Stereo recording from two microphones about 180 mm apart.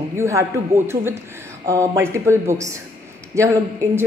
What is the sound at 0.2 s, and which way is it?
A man's voice, 15° right (ahead or behind).